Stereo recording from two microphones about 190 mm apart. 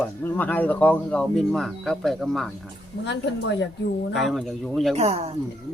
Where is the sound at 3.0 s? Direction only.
70° left (ahead or behind).